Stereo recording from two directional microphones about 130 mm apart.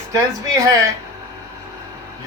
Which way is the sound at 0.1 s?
25° right (ahead or behind).